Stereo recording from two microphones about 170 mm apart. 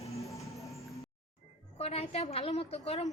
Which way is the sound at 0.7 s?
Centre (ahead or behind).